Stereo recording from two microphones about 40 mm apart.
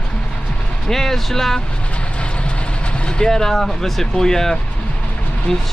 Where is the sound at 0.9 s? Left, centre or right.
Centre.